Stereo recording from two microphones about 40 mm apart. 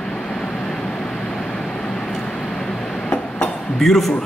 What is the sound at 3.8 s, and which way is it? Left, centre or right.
Speech, centre.